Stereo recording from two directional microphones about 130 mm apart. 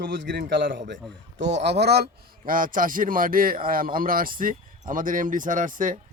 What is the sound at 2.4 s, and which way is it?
A man's voice, 90° right.